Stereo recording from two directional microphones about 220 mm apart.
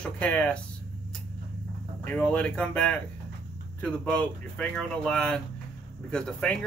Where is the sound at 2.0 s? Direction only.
5° left (ahead or behind).